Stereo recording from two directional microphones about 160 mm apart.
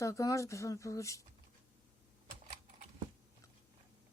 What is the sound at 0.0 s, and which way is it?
Speech, 20° left (ahead or behind).